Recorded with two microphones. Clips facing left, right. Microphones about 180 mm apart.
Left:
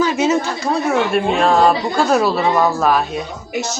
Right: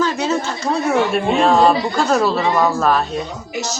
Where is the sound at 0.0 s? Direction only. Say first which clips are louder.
Left 3 dB; 20° left (ahead or behind).